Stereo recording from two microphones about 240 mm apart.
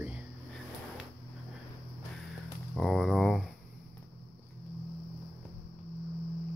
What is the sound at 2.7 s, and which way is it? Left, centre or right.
Speech, centre.